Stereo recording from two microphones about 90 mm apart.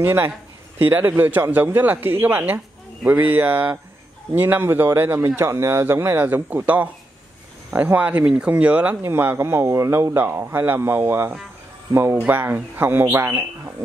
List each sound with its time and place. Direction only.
0.0 s speech: 25° right (ahead or behind)